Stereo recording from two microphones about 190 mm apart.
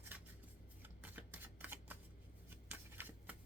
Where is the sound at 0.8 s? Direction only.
10° right (ahead or behind).